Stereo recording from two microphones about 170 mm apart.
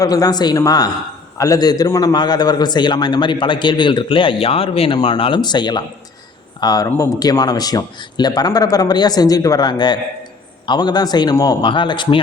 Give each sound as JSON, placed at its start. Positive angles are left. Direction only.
{"t": 0.0, "sound": "a man's voice", "side_deg": 20}